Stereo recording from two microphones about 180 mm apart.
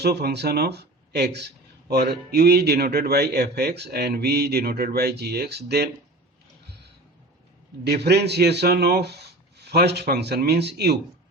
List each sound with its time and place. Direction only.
0.0 s speech: 65° right (ahead or behind)
7.9 s speech: 65° right (ahead or behind)